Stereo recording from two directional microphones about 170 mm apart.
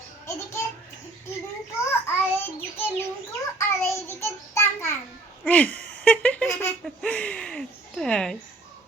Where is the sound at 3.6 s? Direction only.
15° left (ahead or behind).